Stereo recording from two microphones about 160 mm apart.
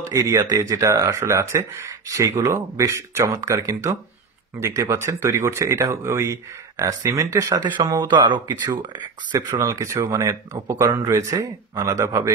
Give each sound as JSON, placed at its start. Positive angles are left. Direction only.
{"t": 0.0, "sound": "speech", "side_deg": -20}